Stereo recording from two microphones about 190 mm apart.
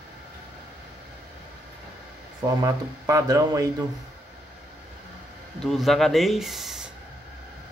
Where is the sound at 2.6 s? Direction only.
15° right (ahead or behind).